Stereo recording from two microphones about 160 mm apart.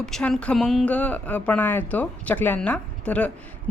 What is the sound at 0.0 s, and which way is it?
A woman's voice, 5° left (ahead or behind).